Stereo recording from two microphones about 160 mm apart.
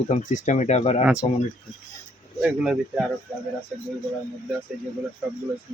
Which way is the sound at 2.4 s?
5° right (ahead or behind).